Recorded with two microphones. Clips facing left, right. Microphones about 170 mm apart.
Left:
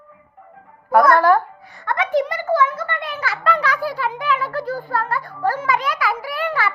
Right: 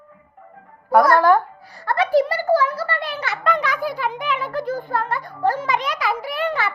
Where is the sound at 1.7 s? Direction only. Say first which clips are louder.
Right 2 dB; 35° right (ahead or behind).